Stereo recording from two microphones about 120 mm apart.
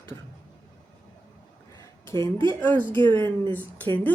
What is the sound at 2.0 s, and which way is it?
Speech, 20° left (ahead or behind).